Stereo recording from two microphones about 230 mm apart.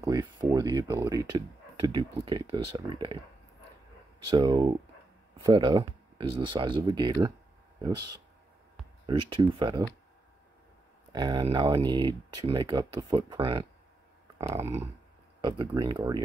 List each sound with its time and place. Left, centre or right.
0.0 s a sound: centre
1.8 s speech: right
4.3 s speech: centre
9.3 s speech: right
11.1 s speech: centre
14.5 s a sound: centre
15.4 s speech: centre